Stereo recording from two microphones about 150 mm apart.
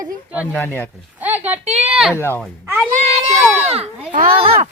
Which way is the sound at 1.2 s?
10° right (ahead or behind).